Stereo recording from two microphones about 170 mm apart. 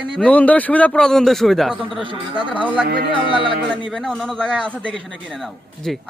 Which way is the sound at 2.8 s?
75° right (ahead or behind).